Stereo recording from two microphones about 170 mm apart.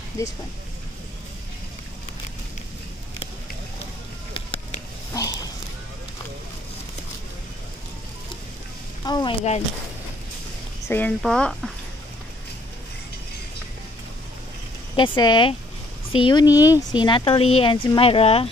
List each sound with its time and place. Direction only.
0.2 s speech: 20° left (ahead or behind)
5.1 s a sound: 20° left (ahead or behind)
9.0 s a woman's voice: 25° left (ahead or behind)
10.9 s speech: 10° left (ahead or behind)
15.0 s speech: 25° left (ahead or behind)